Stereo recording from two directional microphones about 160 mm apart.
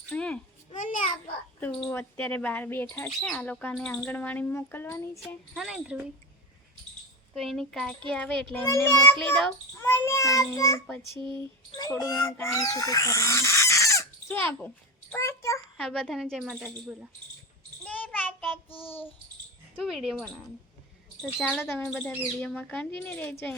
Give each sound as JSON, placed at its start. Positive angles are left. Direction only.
{"t": 0.1, "sound": "a sound", "side_deg": 5}
{"t": 0.8, "sound": "a sound", "side_deg": 55}
{"t": 1.9, "sound": "speech", "side_deg": 10}
{"t": 5.5, "sound": "a woman's voice", "side_deg": -5}
{"t": 7.3, "sound": "a woman's voice", "side_deg": 0}
{"t": 8.6, "sound": "a child's voice", "side_deg": 15}
{"t": 11.2, "sound": "speech", "side_deg": -30}
{"t": 11.8, "sound": "speech", "side_deg": 20}
{"t": 15.8, "sound": "a woman's voice", "side_deg": 5}
{"t": 17.8, "sound": "child singing", "side_deg": 10}
{"t": 19.8, "sound": "a woman's voice", "side_deg": 0}
{"t": 21.6, "sound": "speech", "side_deg": 15}